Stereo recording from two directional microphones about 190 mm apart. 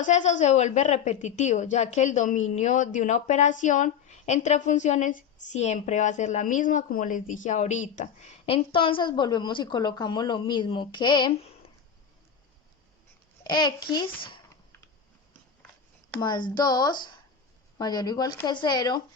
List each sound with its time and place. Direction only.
0.0 s a woman's voice: 40° left (ahead or behind); by 11.3 s 25° left (ahead or behind)
13.4 s a child's voice: 20° left (ahead or behind)
16.2 s speech: 20° left (ahead or behind)